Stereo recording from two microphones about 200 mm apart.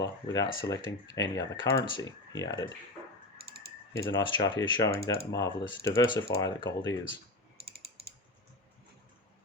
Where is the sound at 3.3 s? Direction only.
50° right (ahead or behind).